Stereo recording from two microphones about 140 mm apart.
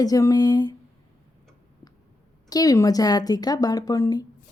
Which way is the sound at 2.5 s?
25° left (ahead or behind).